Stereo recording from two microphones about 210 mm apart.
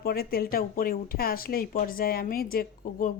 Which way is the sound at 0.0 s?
45° left (ahead or behind).